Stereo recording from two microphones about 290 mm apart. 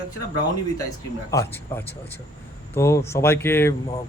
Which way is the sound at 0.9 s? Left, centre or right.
Centre.